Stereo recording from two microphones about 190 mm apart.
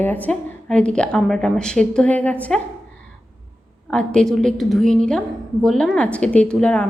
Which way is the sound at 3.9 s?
5° left (ahead or behind).